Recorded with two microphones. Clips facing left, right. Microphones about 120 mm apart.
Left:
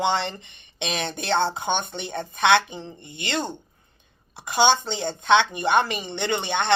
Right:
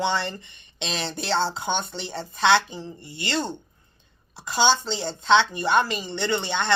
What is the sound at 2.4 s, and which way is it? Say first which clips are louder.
Speech: left 1 dB; 20° left (ahead or behind).